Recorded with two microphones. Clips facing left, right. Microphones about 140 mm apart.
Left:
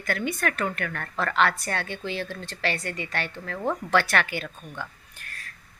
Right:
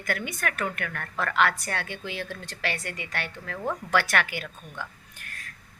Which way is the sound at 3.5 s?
20° left (ahead or behind).